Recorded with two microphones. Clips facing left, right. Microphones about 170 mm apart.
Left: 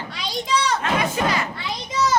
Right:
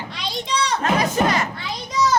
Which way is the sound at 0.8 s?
40° right (ahead or behind).